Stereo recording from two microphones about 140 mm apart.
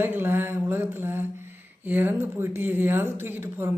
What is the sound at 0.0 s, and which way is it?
Speech, 15° right (ahead or behind).